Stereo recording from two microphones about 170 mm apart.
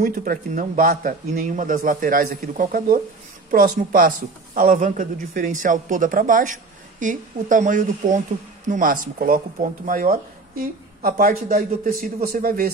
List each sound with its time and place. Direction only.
0.0 s speech: 55° right (ahead or behind)